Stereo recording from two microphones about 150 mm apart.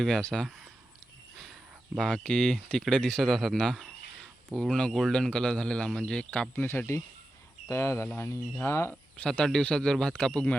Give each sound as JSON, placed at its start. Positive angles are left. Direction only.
{"t": 0.0, "sound": "speech", "side_deg": 5}
{"t": 2.0, "sound": "speech", "side_deg": 5}
{"t": 6.7, "sound": "speech", "side_deg": 20}